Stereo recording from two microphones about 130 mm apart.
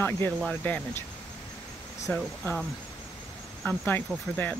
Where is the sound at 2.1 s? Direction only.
15° left (ahead or behind).